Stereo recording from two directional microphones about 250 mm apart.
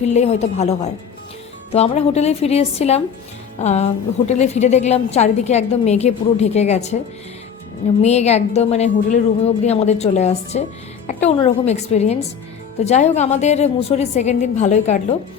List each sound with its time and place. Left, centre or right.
0.0 s a woman's voice: left
8.0 s a woman's voice: left